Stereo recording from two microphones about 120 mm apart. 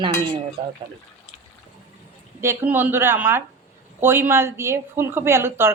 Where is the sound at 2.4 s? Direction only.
20° right (ahead or behind).